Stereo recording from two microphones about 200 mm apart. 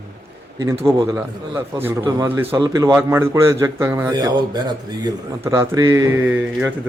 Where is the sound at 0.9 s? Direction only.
15° right (ahead or behind).